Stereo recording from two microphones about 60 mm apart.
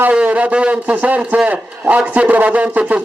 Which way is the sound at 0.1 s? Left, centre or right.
Right.